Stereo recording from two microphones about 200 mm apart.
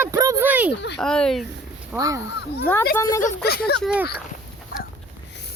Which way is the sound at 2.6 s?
15° left (ahead or behind).